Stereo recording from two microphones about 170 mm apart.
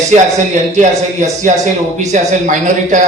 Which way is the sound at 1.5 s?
45° right (ahead or behind).